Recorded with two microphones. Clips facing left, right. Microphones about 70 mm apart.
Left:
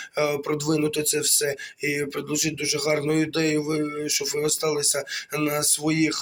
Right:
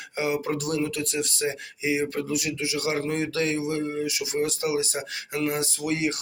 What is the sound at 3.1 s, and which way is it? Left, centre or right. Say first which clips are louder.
Speech: left 4 dB; left.